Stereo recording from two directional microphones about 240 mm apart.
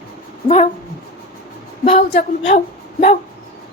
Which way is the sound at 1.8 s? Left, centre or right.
Left.